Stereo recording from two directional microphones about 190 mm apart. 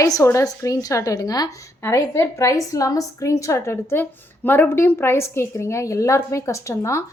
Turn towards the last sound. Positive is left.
turn(degrees=15)  # may be behind; listen again after turning